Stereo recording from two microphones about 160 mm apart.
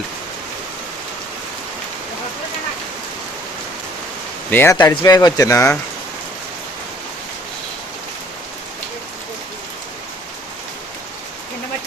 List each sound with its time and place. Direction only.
4.5 s speech: 15° left (ahead or behind)